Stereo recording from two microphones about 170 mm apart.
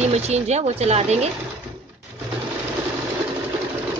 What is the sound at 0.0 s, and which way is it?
Speech, 40° right (ahead or behind).